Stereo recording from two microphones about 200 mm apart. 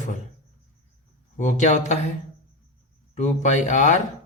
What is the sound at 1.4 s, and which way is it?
Speech, 40° left (ahead or behind).